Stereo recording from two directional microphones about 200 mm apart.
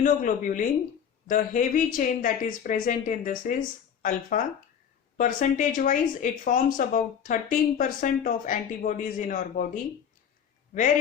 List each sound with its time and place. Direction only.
0.0 s speech: 40° left (ahead or behind)